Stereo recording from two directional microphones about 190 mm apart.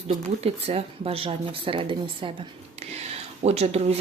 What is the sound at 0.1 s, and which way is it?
Speech, 35° right (ahead or behind).